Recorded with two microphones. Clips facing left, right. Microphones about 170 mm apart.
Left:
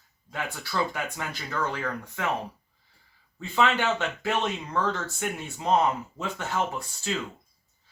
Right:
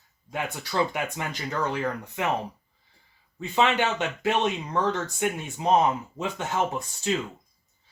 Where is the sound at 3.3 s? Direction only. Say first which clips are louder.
Right 1 dB; 20° right (ahead or behind).